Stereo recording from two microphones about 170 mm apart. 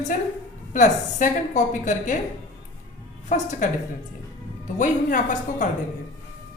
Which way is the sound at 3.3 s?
45° left (ahead or behind).